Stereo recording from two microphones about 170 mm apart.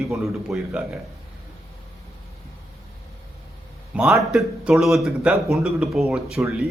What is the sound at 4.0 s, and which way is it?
A man's voice, centre (ahead or behind).